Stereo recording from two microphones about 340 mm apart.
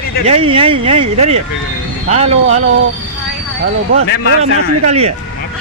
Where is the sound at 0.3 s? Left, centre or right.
Centre.